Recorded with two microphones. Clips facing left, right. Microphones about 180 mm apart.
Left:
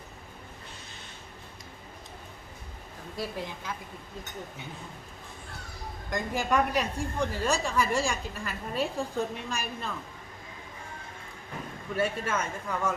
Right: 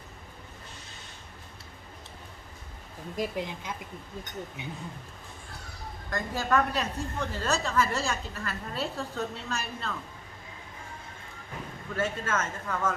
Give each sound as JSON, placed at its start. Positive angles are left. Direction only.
{"t": 3.2, "sound": "speech", "side_deg": -20}
{"t": 6.1, "sound": "a woman's voice", "side_deg": 15}
{"t": 11.9, "sound": "a woman's voice", "side_deg": 10}